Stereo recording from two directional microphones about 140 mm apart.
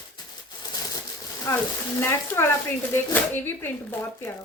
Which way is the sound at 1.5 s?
20° left (ahead or behind).